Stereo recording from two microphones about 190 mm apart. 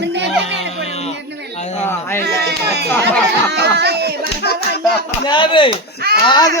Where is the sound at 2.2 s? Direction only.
60° right (ahead or behind).